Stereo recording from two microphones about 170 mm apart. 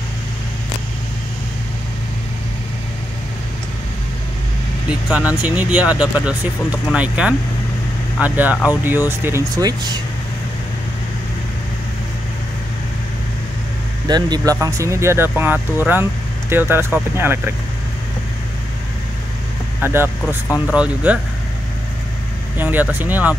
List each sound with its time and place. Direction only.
4.8 s speech: 10° right (ahead or behind)
14.0 s speech: 25° right (ahead or behind)
19.8 s speech: 15° right (ahead or behind)
20.4 s speech: 15° left (ahead or behind)
20.7 s speech: 10° right (ahead or behind)
22.6 s speech: 10° right (ahead or behind)